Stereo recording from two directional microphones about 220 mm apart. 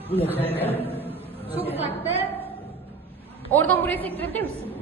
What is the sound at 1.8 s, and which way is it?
Speech, 25° right (ahead or behind).